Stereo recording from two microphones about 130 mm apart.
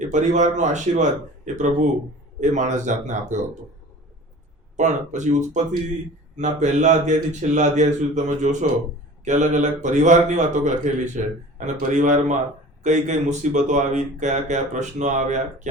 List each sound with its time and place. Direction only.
0.1 s speech: 65° right (ahead or behind)
4.8 s speech: 65° right (ahead or behind)